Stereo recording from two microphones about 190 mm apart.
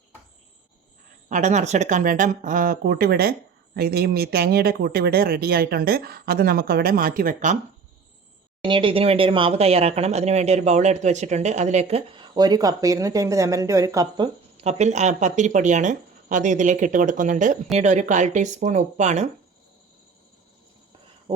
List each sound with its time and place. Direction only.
1.3 s speech: 40° right (ahead or behind)
8.6 s speech: 25° right (ahead or behind)
14.6 s speech: 35° right (ahead or behind)